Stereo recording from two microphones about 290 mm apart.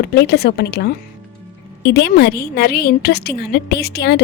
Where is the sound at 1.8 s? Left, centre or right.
Left.